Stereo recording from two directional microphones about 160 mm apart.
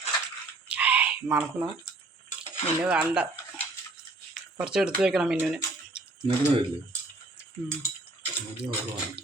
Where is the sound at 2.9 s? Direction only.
5° right (ahead or behind).